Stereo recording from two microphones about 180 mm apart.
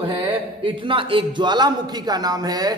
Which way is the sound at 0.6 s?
30° right (ahead or behind).